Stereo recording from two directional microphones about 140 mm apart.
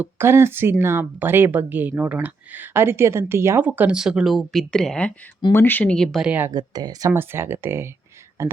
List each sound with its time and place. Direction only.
0.0 s speech: 15° right (ahead or behind)
6.5 s speech: 30° right (ahead or behind)
7.1 s speech: 15° right (ahead or behind)